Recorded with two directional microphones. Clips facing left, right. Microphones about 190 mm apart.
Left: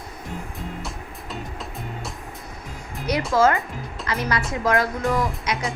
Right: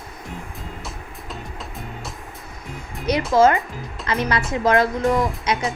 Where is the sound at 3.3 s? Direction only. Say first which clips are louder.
Right 3 dB; 20° right (ahead or behind).